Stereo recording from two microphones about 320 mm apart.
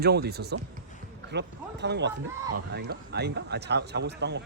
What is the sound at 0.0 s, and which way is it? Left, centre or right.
Speech, right.